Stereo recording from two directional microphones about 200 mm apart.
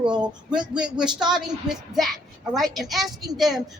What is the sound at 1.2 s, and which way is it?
A woman's voice, 5° right (ahead or behind).